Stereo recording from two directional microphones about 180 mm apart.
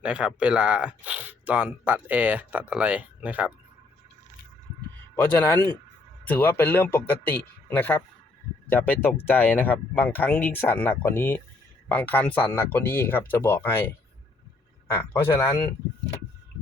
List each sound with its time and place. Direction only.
0.0 s speech: 5° right (ahead or behind)
5.2 s speech: 10° left (ahead or behind)
15.1 s speech: 15° left (ahead or behind)